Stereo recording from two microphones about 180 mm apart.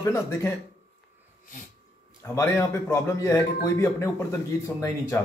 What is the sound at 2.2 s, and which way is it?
A man's voice, 15° left (ahead or behind).